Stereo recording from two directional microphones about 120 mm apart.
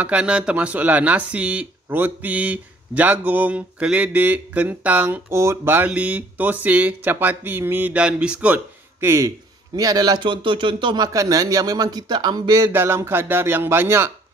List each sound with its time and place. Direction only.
0.0 s speech: 10° right (ahead or behind)
9.0 s speech: 20° right (ahead or behind); by 11.1 s 45° right (ahead or behind)
11.1 s speech: 30° right (ahead or behind)